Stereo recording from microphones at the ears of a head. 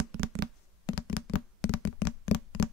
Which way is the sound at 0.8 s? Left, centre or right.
Left.